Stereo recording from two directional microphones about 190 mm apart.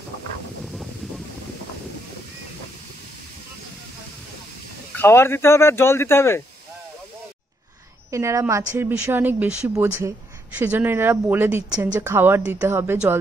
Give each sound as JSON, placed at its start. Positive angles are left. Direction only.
{"t": 4.9, "sound": "speech", "side_deg": 15}
{"t": 8.1, "sound": "a woman's voice", "side_deg": -15}